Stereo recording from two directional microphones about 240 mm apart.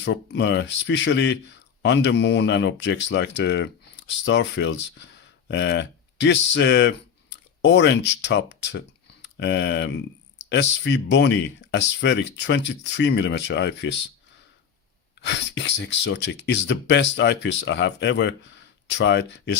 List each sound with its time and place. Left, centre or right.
0.0 s speech: left
15.2 s speech: left